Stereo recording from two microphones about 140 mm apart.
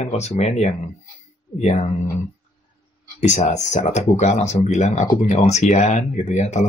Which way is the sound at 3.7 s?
55° left (ahead or behind).